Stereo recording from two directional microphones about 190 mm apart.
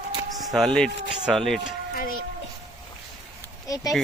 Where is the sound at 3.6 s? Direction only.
20° left (ahead or behind).